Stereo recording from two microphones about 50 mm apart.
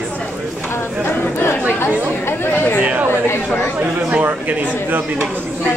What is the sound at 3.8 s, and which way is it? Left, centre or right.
Speech, right.